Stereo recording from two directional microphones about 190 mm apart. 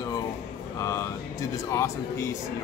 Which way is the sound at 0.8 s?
15° left (ahead or behind).